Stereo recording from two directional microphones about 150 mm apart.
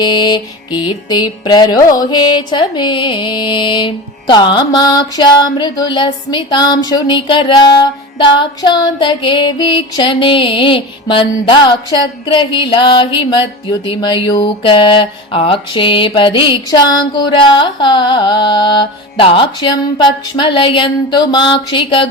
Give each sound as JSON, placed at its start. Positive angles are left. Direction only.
{"t": 0.0, "sound": "mantra", "side_deg": 30}